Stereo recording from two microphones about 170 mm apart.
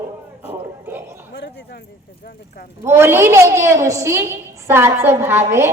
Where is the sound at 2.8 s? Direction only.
15° right (ahead or behind).